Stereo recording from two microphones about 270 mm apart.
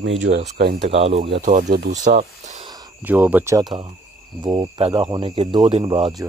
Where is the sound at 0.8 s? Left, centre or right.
Right.